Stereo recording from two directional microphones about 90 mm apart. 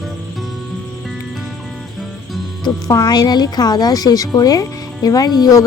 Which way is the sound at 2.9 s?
40° left (ahead or behind).